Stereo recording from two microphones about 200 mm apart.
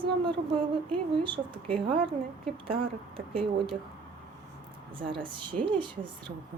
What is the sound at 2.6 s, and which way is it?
Speech, 25° right (ahead or behind).